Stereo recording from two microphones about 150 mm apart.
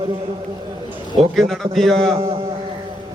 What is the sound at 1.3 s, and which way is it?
Speech, centre (ahead or behind).